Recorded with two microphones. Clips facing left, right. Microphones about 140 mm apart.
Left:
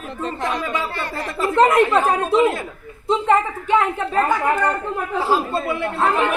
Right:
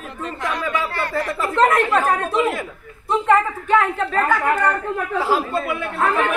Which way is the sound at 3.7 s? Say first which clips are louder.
Even; 20° left (ahead or behind).